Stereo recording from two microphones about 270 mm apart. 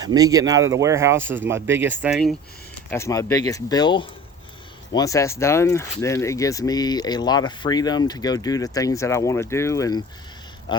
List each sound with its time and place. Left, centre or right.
0.0 s speech: centre
2.9 s speech: centre
10.7 s a sound: centre